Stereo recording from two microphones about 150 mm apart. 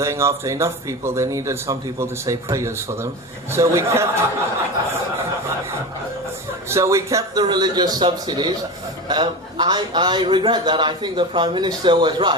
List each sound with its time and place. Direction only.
0.0 s speech: 20° right (ahead or behind)
6.7 s a man's voice: 20° right (ahead or behind)